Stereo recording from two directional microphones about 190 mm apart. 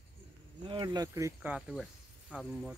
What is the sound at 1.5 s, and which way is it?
Speech, 5° right (ahead or behind).